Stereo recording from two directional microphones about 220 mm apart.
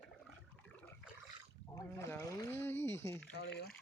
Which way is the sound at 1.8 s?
10° left (ahead or behind).